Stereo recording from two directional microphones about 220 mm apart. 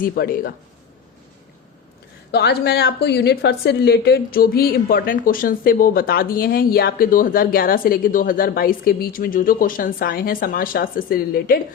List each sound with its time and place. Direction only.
0.0 s a woman's voice: 40° left (ahead or behind)
2.3 s a woman's voice: 50° left (ahead or behind)